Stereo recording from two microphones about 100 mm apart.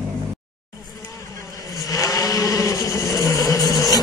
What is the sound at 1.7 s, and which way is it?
Vehicle, 35° left (ahead or behind).